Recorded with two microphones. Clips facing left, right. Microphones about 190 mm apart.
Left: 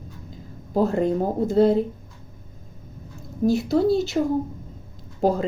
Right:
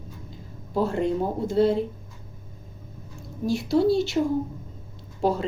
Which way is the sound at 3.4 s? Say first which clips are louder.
Left 5 dB; 40° left (ahead or behind).